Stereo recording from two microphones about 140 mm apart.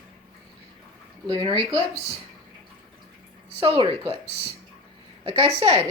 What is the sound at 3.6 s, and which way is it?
Speech, 35° right (ahead or behind).